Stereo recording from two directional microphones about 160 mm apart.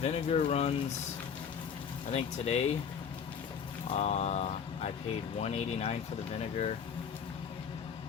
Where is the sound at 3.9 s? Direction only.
45° left (ahead or behind).